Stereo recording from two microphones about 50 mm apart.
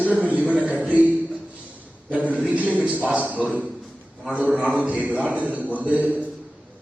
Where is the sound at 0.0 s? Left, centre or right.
Right.